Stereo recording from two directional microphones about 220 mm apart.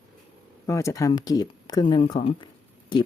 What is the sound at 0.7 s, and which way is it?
Speech, 15° left (ahead or behind).